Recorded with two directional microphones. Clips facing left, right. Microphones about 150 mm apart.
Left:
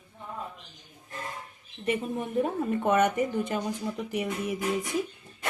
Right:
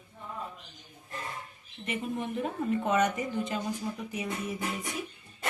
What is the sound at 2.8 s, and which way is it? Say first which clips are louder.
Speech: left 5 dB; 60° left (ahead or behind).